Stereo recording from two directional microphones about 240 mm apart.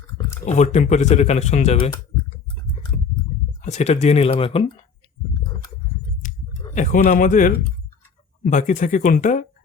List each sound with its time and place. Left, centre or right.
0.4 s speech: left
3.6 s speech: left
6.7 s speech: left